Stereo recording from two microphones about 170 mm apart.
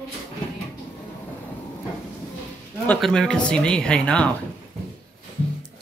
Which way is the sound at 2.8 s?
5° left (ahead or behind).